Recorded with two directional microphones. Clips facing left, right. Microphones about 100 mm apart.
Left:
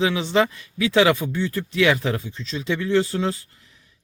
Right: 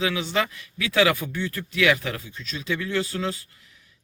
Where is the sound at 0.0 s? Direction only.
25° left (ahead or behind).